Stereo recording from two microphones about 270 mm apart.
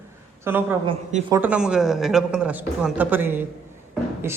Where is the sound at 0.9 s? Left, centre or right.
Centre.